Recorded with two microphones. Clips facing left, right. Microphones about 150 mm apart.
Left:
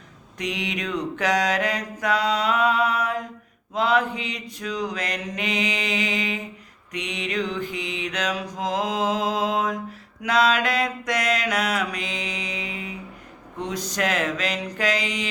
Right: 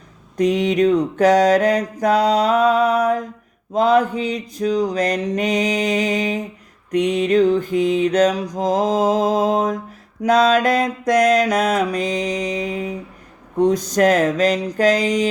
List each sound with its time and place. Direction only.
0.3 s mantra: 45° right (ahead or behind)